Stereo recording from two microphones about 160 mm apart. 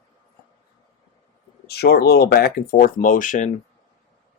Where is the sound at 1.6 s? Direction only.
85° left; by 3.5 s 50° left (ahead or behind).